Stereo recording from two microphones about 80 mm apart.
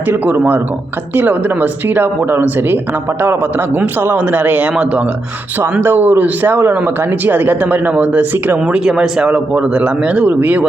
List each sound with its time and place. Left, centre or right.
0.1 s speech: right
3.8 s speech: right